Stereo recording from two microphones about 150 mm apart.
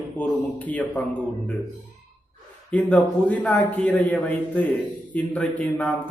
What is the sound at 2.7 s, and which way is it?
A man's voice, 10° left (ahead or behind).